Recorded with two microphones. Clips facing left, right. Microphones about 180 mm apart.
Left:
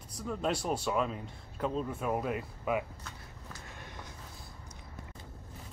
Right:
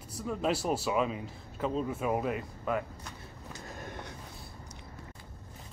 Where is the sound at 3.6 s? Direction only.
45° right (ahead or behind).